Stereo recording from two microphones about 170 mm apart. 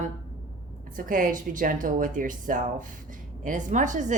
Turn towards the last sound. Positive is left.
turn(degrees=-50)  # may be behind; listen again after turning